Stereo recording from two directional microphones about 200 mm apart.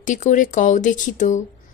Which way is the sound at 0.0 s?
40° left (ahead or behind).